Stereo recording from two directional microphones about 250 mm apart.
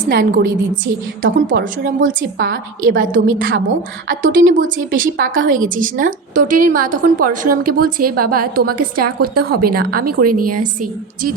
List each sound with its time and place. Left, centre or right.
0.1 s a woman's voice: right